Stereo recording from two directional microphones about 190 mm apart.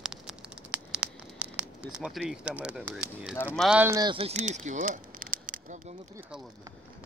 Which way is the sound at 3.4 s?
10° left (ahead or behind).